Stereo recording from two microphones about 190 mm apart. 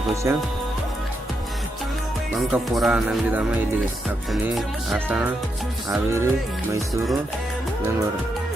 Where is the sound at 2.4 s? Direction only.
Centre (ahead or behind).